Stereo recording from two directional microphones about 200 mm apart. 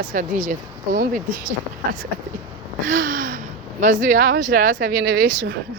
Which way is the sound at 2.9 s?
40° right (ahead or behind).